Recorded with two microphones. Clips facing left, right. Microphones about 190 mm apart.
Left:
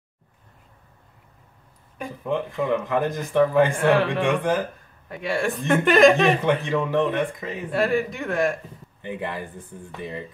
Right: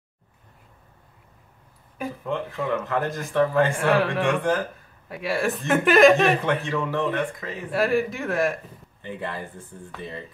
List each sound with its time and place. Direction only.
2.2 s speech: 15° left (ahead or behind)
3.7 s speech: centre (ahead or behind)
4.4 s speech: 15° left (ahead or behind)
5.0 s speech: 5° right (ahead or behind)
6.4 s speech: 15° left (ahead or behind)
7.7 s speech: centre (ahead or behind)
9.0 s speech: 15° left (ahead or behind)